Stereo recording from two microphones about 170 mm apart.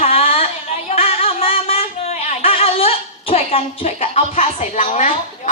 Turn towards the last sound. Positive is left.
turn(degrees=45)  # may be behind; listen again after turning